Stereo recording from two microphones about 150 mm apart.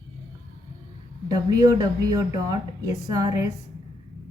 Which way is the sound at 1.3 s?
25° right (ahead or behind).